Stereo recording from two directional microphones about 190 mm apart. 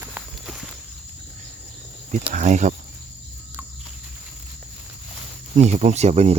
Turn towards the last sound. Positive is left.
turn(degrees=-35)  # may be behind; listen again after turning